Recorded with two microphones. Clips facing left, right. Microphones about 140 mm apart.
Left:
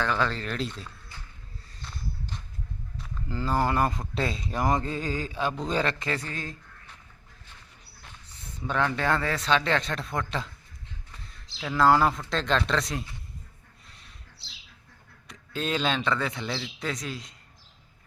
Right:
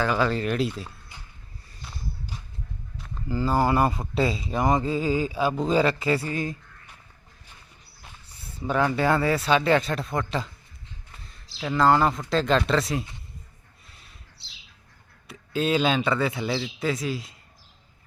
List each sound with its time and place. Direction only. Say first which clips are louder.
0.0 s speech: right 4 dB; 10° right (ahead or behind)
1.1 s a sound: even; 15° right (ahead or behind)
1.8 s walk: right 1 dB; 10° right (ahead or behind)
3.0 s speech: right 6 dB; 5° right (ahead or behind)
8.0 s speech: right 1 dB; 10° right (ahead or behind)
11.1 s a sound: even; centre (ahead or behind)
11.6 s a man's voice: right 1 dB; centre (ahead or behind)
13.8 s a sound: right 1 dB; 5° right (ahead or behind)
15.3 s a man's voice: right 6 dB; 5° right (ahead or behind)